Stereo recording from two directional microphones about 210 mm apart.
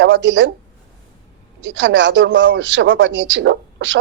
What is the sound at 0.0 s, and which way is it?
Speech, 60° right (ahead or behind).